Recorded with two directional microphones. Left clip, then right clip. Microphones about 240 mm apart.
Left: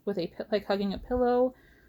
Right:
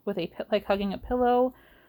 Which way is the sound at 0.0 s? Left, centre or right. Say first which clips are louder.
Right 1 dB; right.